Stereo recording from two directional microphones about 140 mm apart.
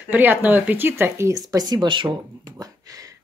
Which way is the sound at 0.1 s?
15° right (ahead or behind).